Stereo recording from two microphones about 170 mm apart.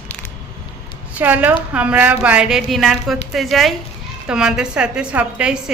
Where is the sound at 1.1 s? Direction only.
10° right (ahead or behind).